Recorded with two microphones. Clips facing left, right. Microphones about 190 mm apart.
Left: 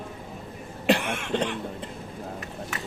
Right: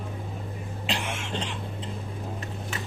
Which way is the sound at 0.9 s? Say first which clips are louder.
Left 9 dB; 60° left (ahead or behind).